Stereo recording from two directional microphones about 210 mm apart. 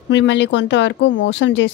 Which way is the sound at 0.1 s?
60° left (ahead or behind).